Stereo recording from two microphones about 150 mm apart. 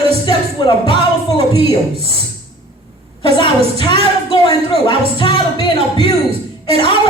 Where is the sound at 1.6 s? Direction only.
40° right (ahead or behind).